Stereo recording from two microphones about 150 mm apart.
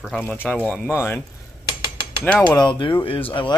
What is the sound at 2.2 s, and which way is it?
Speech, 10° left (ahead or behind).